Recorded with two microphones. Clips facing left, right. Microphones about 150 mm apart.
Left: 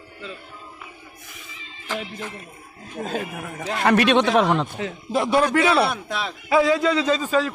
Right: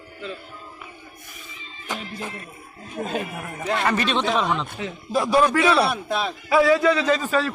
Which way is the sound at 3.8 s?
65° left (ahead or behind).